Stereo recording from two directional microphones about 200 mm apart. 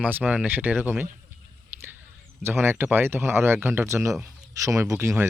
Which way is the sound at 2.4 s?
10° right (ahead or behind).